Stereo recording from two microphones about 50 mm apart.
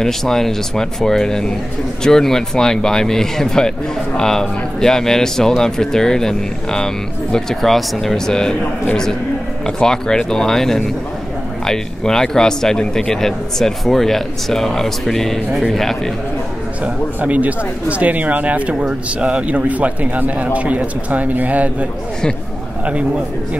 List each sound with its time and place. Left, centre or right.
0.0 s a man's voice: centre
9.7 s a man's voice: centre
16.8 s speech: right